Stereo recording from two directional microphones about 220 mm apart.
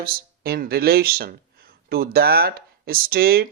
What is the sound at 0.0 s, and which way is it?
Speech, 45° right (ahead or behind).